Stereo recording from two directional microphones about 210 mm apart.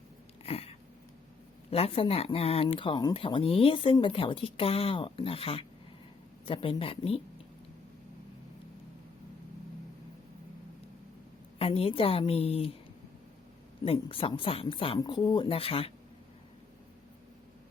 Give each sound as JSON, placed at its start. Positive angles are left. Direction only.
{"t": 0.4, "sound": "a sound", "side_deg": 30}
{"t": 1.7, "sound": "speech", "side_deg": 25}
{"t": 11.6, "sound": "speech", "side_deg": 25}
{"t": 13.8, "sound": "speech", "side_deg": 25}